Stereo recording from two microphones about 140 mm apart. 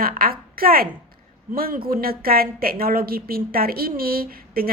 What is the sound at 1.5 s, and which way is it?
A woman's voice, 90° right.